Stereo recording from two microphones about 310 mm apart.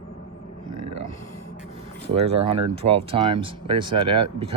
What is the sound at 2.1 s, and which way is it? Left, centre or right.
Speech, centre.